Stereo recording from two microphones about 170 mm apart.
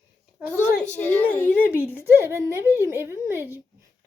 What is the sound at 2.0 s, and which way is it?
A woman's voice, 15° right (ahead or behind).